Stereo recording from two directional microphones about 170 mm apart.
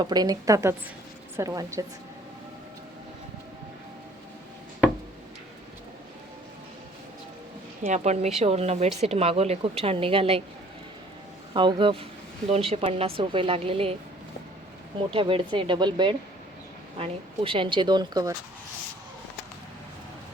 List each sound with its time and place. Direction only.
0.0 s speech: 25° right (ahead or behind)
7.9 s a woman's voice: 40° right (ahead or behind)
11.5 s a woman's voice: 30° right (ahead or behind)
15.1 s speech: 30° right (ahead or behind)